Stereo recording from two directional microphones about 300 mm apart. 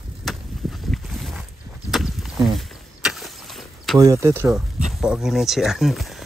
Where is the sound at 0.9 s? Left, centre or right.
Centre.